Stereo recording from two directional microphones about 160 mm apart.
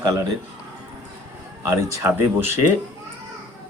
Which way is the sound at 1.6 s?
15° right (ahead or behind).